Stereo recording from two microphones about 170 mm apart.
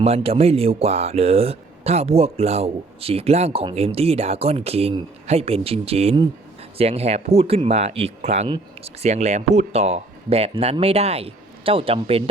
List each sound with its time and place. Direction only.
0.0 s speech: 35° right (ahead or behind)